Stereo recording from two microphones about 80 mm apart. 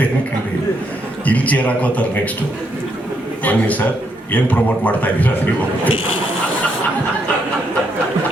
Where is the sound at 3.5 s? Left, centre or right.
Centre.